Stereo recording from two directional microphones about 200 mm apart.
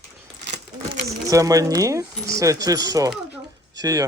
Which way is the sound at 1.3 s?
15° right (ahead or behind).